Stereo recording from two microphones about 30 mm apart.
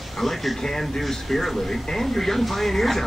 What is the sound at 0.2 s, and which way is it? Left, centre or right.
Speech, centre.